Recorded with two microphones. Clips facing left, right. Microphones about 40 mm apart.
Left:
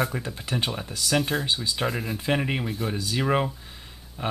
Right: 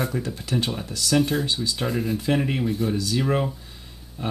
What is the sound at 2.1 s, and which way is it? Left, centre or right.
Speech, centre.